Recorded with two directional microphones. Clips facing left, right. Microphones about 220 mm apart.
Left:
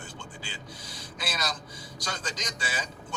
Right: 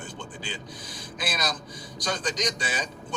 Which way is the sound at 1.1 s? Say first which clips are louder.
Right 3 dB; 15° right (ahead or behind).